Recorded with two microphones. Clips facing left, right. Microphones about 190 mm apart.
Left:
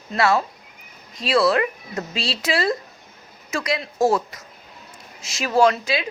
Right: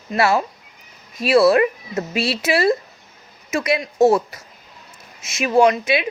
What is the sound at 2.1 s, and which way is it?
Speech, 25° left (ahead or behind).